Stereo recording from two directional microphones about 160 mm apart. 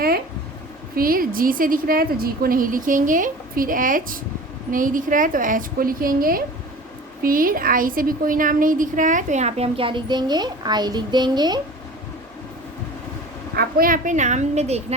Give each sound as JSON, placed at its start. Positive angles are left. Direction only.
{"t": 0.9, "sound": "a woman's voice", "side_deg": -65}
{"t": 13.6, "sound": "a woman's voice", "side_deg": -65}